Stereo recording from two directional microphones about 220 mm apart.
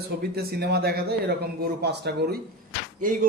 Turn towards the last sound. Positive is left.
turn(degrees=-35)  # may be behind; listen again after turning